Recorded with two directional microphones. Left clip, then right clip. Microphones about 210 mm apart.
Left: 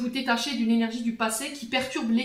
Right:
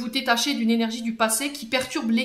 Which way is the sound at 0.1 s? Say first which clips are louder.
Right 6 dB; 50° right (ahead or behind).